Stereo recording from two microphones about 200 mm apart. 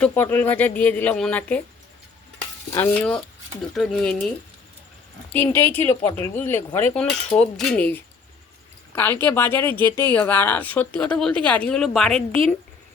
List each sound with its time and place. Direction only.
0.0 s speech: 10° left (ahead or behind)
2.7 s speech: 10° left (ahead or behind)
5.3 s speech: 10° left (ahead or behind)
9.8 s speech: 20° right (ahead or behind)
10.1 s speech: 10° left (ahead or behind)